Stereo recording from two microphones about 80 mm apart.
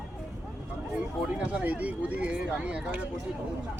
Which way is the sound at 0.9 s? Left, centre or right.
Centre.